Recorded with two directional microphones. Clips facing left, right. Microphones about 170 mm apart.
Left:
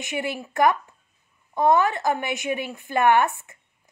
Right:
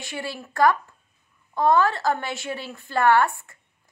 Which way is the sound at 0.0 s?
20° left (ahead or behind).